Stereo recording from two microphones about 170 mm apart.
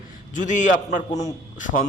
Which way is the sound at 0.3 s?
45° left (ahead or behind).